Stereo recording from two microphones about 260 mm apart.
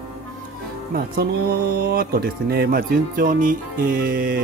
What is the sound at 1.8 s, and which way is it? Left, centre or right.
Speech, right.